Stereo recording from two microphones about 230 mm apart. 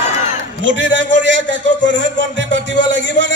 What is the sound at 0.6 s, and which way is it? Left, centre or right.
A man's voice, right.